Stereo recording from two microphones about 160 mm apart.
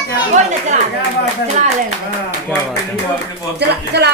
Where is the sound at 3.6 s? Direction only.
90° right.